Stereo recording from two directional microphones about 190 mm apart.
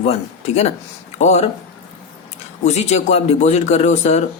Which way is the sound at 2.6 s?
35° left (ahead or behind).